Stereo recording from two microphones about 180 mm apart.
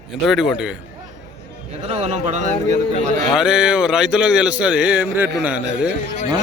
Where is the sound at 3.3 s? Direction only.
5° right (ahead or behind).